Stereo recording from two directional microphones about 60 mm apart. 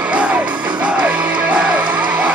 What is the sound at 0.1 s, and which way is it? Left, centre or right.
Music, centre.